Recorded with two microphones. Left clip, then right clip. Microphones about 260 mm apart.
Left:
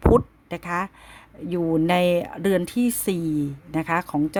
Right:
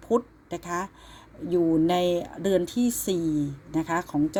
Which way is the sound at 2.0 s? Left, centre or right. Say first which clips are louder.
Left 4 dB; left.